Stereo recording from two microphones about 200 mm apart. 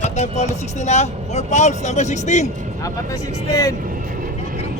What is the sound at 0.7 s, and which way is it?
Speech, 35° left (ahead or behind).